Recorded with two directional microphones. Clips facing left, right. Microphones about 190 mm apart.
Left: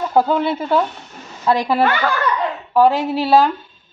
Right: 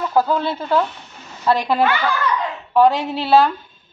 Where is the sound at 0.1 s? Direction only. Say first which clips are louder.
Left 3 dB; 20° left (ahead or behind).